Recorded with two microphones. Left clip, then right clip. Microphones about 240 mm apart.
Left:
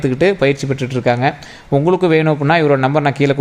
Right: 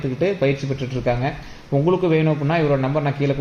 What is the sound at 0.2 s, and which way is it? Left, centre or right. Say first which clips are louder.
Speech: left 6 dB; left.